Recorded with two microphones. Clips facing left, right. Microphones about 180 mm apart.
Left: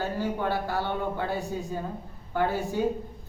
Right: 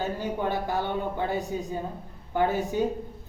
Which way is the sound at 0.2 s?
20° right (ahead or behind).